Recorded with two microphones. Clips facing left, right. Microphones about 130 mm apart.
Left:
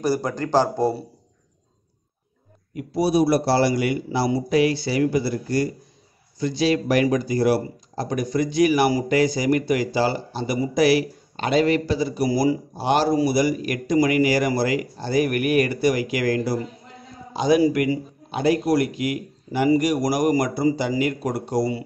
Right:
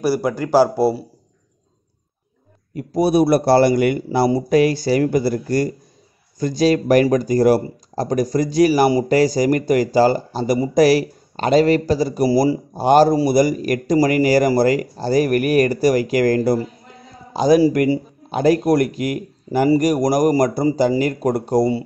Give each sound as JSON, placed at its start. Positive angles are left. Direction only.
{"t": 0.0, "sound": "speech", "side_deg": -10}
{"t": 2.7, "sound": "speech", "side_deg": -45}
{"t": 12.7, "sound": "speech", "side_deg": -45}
{"t": 18.3, "sound": "speech", "side_deg": -45}